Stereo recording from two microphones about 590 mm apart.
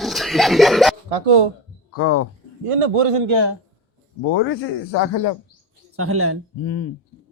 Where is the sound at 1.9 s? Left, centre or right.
Left.